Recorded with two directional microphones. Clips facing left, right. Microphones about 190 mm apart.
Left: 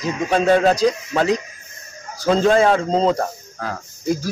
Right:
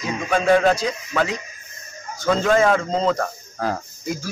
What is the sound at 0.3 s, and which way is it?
Speech, 30° left (ahead or behind).